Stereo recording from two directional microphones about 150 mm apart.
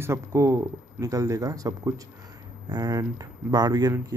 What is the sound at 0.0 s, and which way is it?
Speech, 20° right (ahead or behind).